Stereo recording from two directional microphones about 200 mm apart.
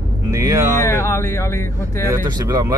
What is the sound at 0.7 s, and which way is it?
Speech, 15° left (ahead or behind).